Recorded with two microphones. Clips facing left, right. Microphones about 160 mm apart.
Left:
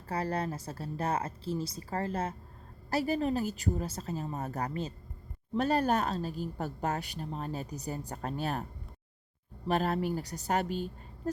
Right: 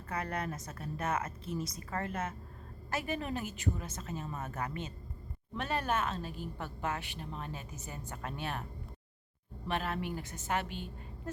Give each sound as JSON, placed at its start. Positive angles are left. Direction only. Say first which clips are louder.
{"t": 0.1, "sound": "a woman's voice", "louder": "left 4 dB", "side_deg": 30}
{"t": 9.6, "sound": "a woman's voice", "louder": "left 6 dB", "side_deg": 40}